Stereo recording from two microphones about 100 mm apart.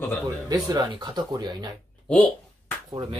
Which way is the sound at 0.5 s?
40° right (ahead or behind).